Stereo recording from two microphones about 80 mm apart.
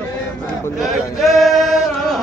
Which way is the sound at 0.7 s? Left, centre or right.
Centre.